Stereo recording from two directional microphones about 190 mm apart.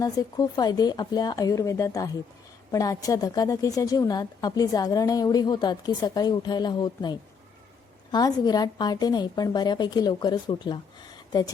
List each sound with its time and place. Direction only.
0.0 s a woman's voice: 20° left (ahead or behind)